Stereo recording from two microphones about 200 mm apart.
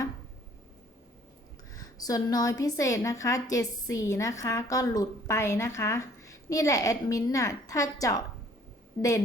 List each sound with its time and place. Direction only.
1.7 s a woman's voice: 20° left (ahead or behind)